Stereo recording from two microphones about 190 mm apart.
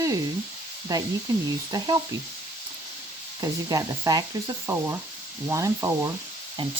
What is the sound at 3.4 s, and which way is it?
Speech, 20° right (ahead or behind).